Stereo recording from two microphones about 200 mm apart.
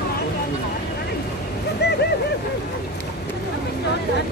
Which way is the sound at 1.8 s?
55° left (ahead or behind).